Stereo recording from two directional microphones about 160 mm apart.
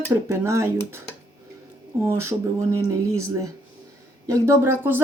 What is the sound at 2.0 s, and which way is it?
Speech, 15° right (ahead or behind).